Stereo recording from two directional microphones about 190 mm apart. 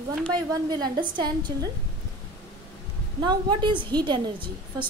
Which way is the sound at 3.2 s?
20° right (ahead or behind).